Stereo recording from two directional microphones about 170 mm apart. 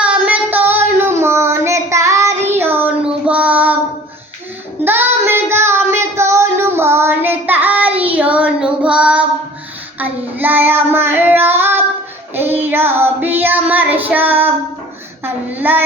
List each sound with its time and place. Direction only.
0.0 s child singing: 10° right (ahead or behind)
4.8 s child singing: 10° right (ahead or behind)